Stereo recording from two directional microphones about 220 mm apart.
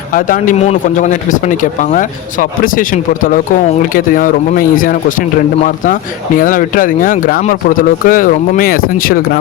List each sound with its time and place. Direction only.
0.1 s speech: 40° left (ahead or behind)